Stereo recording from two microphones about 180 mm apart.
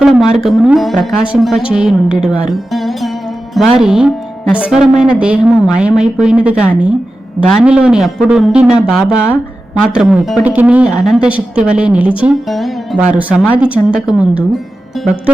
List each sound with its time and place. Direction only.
0.0 s speech: 5° right (ahead or behind)
1.7 s music: 5° right (ahead or behind)
3.8 s a woman's voice: 5° right (ahead or behind)